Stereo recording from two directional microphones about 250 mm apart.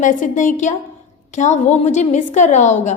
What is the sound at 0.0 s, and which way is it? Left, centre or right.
A woman's voice, left.